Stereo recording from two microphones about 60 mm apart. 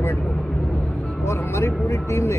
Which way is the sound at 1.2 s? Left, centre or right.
Left.